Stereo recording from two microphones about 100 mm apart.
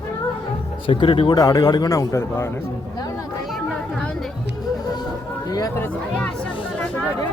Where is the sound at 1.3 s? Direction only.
35° left (ahead or behind).